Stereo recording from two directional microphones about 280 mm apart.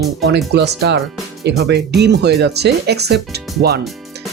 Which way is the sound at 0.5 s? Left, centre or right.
Right.